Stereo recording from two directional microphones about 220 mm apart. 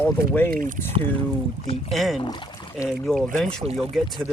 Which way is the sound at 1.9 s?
Centre (ahead or behind).